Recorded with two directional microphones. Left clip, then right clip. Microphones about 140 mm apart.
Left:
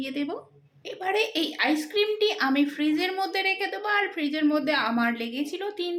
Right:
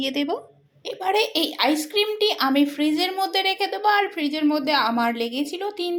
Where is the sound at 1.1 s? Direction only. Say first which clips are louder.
Right 4 dB; 15° right (ahead or behind).